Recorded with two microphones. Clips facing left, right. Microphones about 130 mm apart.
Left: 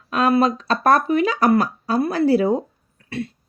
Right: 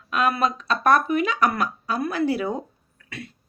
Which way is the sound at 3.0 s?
30° left (ahead or behind).